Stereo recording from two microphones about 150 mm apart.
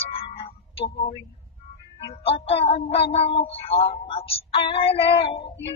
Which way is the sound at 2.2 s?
40° left (ahead or behind).